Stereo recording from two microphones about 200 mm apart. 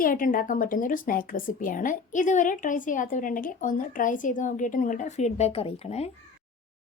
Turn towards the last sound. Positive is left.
turn(degrees=30)  # may be behind; listen again after turning